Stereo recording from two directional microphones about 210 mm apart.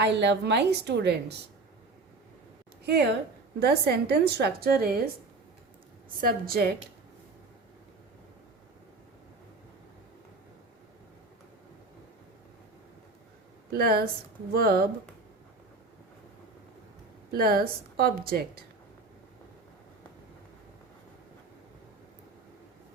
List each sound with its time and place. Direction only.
0.0 s a woman's voice: 55° right (ahead or behind)
2.8 s a woman's voice: 50° right (ahead or behind)
6.1 s a woman's voice: 45° right (ahead or behind)
13.7 s a woman's voice: 45° right (ahead or behind)
17.3 s a woman's voice: 45° right (ahead or behind)